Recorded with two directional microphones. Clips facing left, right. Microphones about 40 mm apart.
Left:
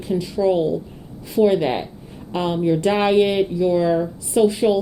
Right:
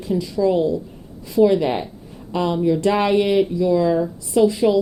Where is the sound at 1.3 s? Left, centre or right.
Left.